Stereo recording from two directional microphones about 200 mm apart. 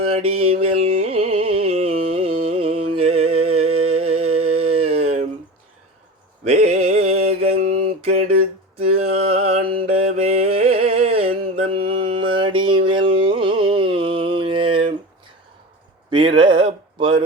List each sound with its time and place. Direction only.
0.0 s mantra: 30° right (ahead or behind)
0.4 s music: 30° right (ahead or behind)
1.5 s carnatic music: 30° right (ahead or behind)
3.0 s music: 30° right (ahead or behind)
4.5 s a sound: 30° right (ahead or behind)
6.4 s mantra: 35° right (ahead or behind)
9.0 s music: 30° right (ahead or behind)
9.6 s a sound: 30° right (ahead or behind)
12.0 s music: 25° right (ahead or behind)
16.0 s a sound: 25° right (ahead or behind)